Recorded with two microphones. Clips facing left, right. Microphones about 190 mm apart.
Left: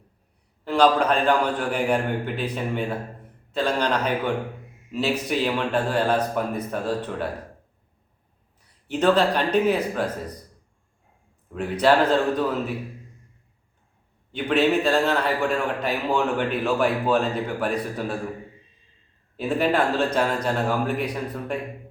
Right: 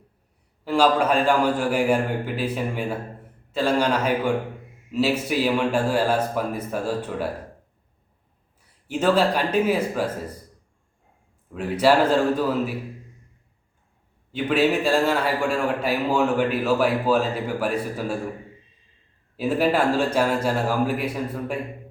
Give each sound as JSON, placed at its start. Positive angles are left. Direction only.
{"t": 0.6, "sound": "a man's voice", "side_deg": -5}
{"t": 8.9, "sound": "a man's voice", "side_deg": -10}
{"t": 11.5, "sound": "a man's voice", "side_deg": -5}
{"t": 14.3, "sound": "a man's voice", "side_deg": -5}
{"t": 19.4, "sound": "a man's voice", "side_deg": -5}